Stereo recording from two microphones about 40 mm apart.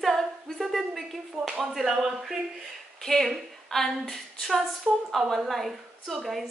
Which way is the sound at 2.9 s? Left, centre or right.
Centre.